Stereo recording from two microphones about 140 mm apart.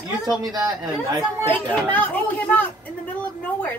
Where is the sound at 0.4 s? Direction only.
25° right (ahead or behind).